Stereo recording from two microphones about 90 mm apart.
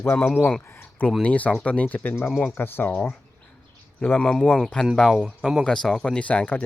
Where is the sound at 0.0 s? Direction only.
25° left (ahead or behind).